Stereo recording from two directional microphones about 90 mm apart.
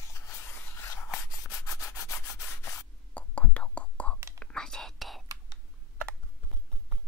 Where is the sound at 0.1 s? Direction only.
30° left (ahead or behind).